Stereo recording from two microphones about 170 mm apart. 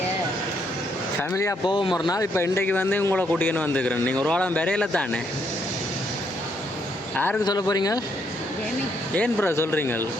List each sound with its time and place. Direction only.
1.3 s a man's voice: 15° left (ahead or behind)
7.4 s speech: 25° left (ahead or behind)
9.1 s a man's voice: 10° left (ahead or behind)